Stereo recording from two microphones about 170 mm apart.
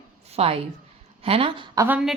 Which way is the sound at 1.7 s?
10° right (ahead or behind).